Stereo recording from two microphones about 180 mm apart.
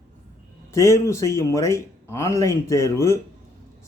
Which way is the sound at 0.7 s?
15° left (ahead or behind).